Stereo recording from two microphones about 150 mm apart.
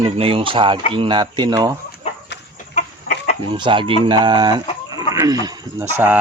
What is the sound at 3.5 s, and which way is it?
Speech, 35° right (ahead or behind).